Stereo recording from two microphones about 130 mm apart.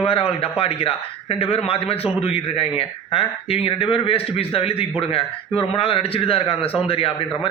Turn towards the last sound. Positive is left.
turn(degrees=45)  # may be behind; listen again after turning